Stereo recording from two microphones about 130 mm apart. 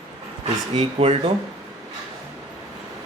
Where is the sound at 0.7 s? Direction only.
55° right (ahead or behind).